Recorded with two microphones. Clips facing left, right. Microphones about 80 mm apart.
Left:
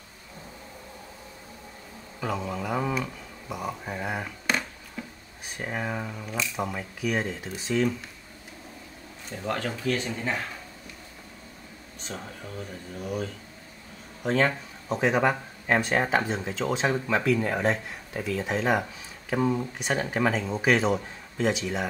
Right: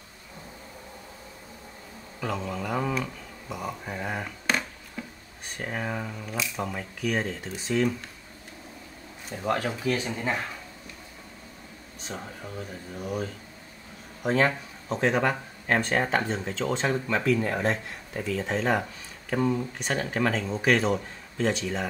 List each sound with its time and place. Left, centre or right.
2.1 s speech: centre
9.3 s speech: centre
12.0 s speech: centre